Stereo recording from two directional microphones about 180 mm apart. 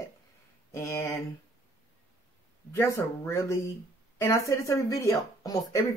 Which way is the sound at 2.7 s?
15° left (ahead or behind).